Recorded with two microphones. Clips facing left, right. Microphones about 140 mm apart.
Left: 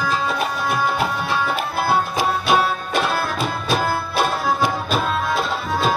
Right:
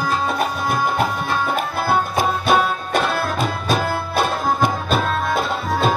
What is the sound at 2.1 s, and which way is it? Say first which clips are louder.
Music: right 1 dB; 50° right (ahead or behind).